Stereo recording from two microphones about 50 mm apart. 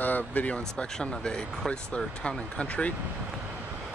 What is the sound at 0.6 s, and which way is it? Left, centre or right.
Speech, centre.